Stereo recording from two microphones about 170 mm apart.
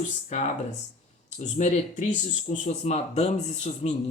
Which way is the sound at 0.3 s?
45° left (ahead or behind).